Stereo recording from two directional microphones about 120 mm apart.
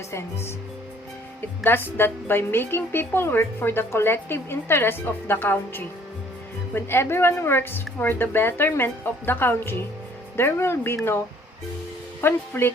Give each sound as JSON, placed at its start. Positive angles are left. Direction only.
{"t": 0.1, "sound": "a woman's voice", "side_deg": 20}
{"t": 12.2, "sound": "speech", "side_deg": 20}